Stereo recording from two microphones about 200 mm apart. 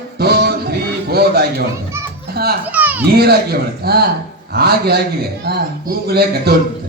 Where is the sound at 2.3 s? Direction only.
50° right (ahead or behind).